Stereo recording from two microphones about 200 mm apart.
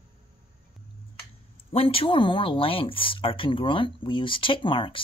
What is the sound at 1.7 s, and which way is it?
Speech, 30° left (ahead or behind).